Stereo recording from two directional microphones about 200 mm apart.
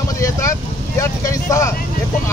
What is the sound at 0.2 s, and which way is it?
Vehicle, 15° left (ahead or behind).